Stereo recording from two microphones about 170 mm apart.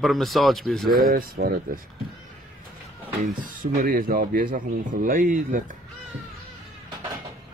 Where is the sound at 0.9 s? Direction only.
60° right (ahead or behind).